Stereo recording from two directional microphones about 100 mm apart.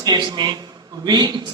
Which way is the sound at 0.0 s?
45° right (ahead or behind).